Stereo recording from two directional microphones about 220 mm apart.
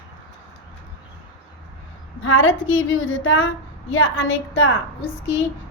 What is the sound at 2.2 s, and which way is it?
A woman's voice, 65° left (ahead or behind).